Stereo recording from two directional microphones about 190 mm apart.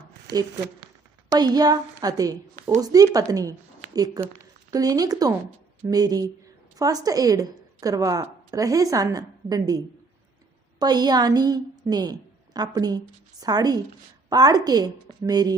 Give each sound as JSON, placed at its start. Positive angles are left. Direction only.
{"t": 0.3, "sound": "speech", "side_deg": -65}
{"t": 1.3, "sound": "a woman's voice", "side_deg": -20}